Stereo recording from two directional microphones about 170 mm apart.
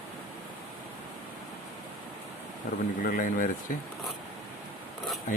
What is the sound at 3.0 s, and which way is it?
Speech, 55° left (ahead or behind).